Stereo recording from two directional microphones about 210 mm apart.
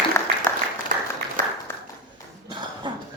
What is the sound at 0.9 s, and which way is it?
Applause, 40° right (ahead or behind).